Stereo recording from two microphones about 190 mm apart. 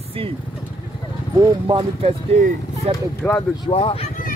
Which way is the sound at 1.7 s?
30° right (ahead or behind).